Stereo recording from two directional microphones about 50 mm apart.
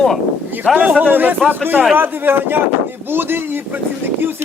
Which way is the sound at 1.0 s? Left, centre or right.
Right.